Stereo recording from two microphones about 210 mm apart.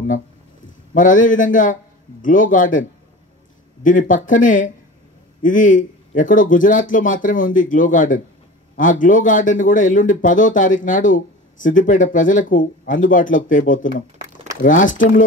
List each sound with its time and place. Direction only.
0.9 s speech: 40° left (ahead or behind)
3.8 s speech: 40° left (ahead or behind)